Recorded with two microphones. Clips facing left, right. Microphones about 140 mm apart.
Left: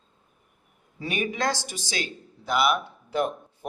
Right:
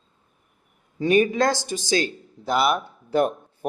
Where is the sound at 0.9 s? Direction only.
40° right (ahead or behind).